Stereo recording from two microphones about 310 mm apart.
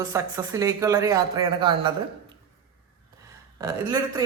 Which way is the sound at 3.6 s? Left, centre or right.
Centre.